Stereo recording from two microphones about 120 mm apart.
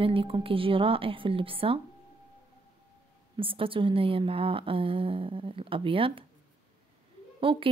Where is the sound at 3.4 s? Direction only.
50° right (ahead or behind).